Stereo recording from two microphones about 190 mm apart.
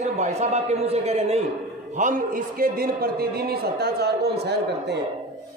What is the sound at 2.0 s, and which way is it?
A man's voice, 45° right (ahead or behind).